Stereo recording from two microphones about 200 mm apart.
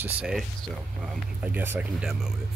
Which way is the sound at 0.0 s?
5° right (ahead or behind).